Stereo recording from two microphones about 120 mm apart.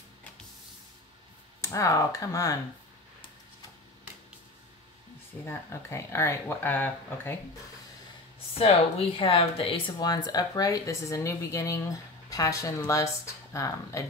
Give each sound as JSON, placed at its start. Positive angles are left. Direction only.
{"t": 1.6, "sound": "speech", "side_deg": 25}
{"t": 5.4, "sound": "speech", "side_deg": 20}
{"t": 8.5, "sound": "speech", "side_deg": 55}
{"t": 9.9, "sound": "speech", "side_deg": 35}